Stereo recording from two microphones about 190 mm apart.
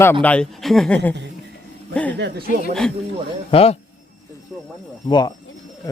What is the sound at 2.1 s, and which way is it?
Speech, 60° right (ahead or behind).